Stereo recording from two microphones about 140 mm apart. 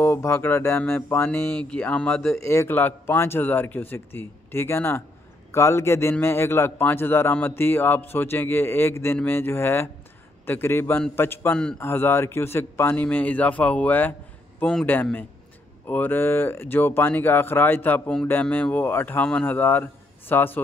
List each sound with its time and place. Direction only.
0.0 s speech: 15° left (ahead or behind)
1.2 s speech: 5° left (ahead or behind)
2.4 s speech: 20° left (ahead or behind)